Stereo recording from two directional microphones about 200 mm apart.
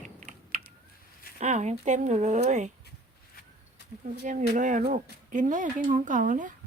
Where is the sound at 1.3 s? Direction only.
35° right (ahead or behind).